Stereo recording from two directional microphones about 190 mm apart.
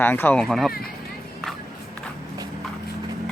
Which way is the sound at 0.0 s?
10° left (ahead or behind).